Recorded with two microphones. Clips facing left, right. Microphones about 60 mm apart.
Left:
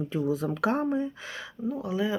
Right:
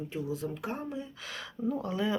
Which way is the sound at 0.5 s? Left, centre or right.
Left.